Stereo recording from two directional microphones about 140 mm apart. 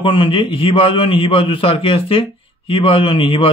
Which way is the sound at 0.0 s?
35° left (ahead or behind).